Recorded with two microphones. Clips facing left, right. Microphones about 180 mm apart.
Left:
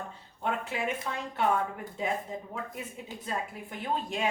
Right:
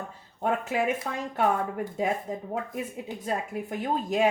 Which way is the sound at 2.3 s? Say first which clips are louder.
Right 4 dB; 45° right (ahead or behind).